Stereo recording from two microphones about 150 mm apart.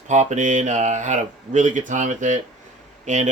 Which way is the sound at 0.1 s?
55° right (ahead or behind).